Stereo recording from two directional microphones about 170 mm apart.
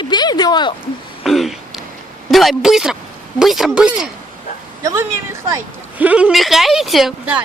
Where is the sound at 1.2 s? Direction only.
Centre (ahead or behind).